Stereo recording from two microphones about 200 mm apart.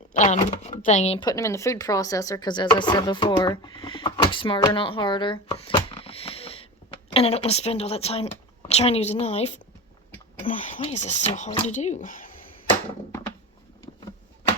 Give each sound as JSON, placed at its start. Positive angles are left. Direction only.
{"t": 0.1, "sound": "a woman's voice", "side_deg": 35}
{"t": 1.3, "sound": "a woman's voice", "side_deg": 15}